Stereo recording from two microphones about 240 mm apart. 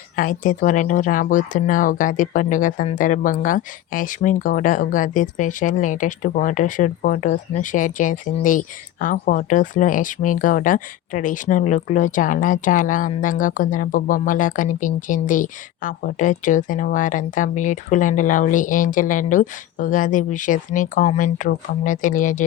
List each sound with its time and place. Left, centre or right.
0.2 s speech: left